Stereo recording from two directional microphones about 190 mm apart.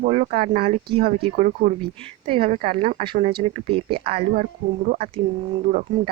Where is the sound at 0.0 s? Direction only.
40° right (ahead or behind).